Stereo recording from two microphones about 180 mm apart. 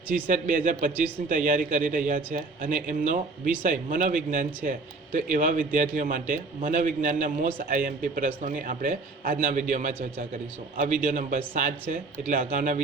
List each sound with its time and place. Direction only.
0.1 s a man's voice: 50° right (ahead or behind)